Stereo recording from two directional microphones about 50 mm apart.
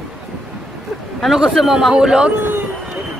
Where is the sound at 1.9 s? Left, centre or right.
Centre.